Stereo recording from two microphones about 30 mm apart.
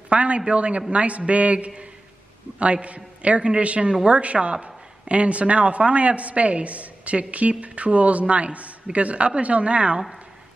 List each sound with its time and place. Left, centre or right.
0.1 s a man's voice: right